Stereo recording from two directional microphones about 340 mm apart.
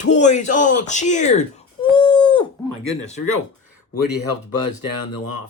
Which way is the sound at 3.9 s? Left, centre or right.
Left.